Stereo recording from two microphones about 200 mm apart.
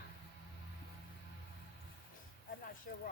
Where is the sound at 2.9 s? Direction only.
45° left (ahead or behind).